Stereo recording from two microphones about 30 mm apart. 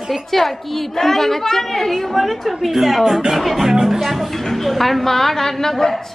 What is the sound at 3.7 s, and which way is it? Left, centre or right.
Speech, centre.